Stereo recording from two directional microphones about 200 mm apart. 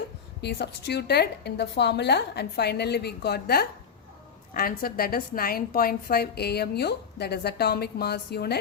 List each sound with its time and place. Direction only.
0.4 s a woman's voice: 55° left (ahead or behind)